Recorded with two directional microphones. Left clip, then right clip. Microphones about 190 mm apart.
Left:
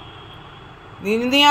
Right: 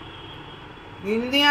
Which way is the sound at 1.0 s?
45° left (ahead or behind).